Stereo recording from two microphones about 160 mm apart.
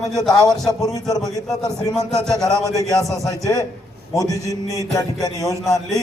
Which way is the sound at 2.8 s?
20° left (ahead or behind).